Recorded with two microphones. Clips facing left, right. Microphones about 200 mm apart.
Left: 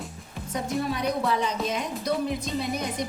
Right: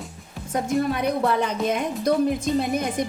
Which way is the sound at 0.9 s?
55° right (ahead or behind).